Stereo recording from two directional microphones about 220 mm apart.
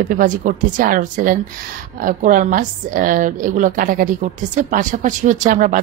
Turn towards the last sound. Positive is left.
turn(degrees=-35)  # may be behind; listen again after turning